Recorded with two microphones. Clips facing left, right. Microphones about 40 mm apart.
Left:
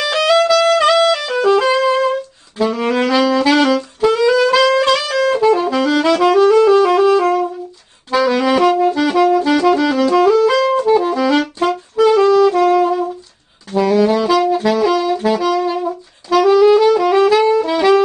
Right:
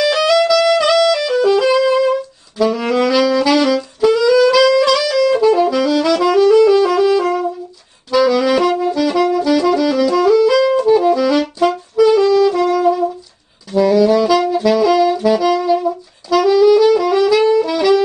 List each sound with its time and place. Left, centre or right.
0.0 s music: left
2.6 s saxophone: left
3.4 s saxophone: left
5.9 s music: left
8.1 s saxophone: left
8.5 s brass instrument: left
10.8 s brass instrument: centre
12.0 s saxophone: left
17.0 s music: left